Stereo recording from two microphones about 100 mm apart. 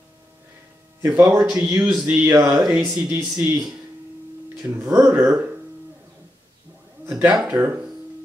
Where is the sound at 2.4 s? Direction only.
10° right (ahead or behind).